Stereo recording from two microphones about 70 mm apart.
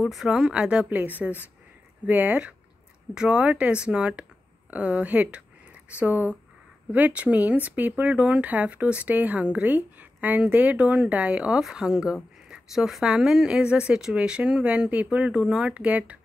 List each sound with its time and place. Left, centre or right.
0.0 s a woman's voice: centre
0.8 s a woman's voice: right